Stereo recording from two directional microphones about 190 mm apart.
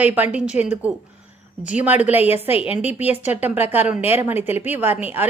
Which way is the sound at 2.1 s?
35° left (ahead or behind).